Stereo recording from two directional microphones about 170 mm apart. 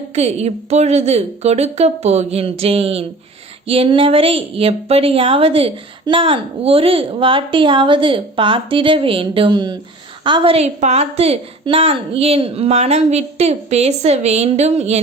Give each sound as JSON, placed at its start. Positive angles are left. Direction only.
{"t": 0.1, "sound": "a woman's voice", "side_deg": -40}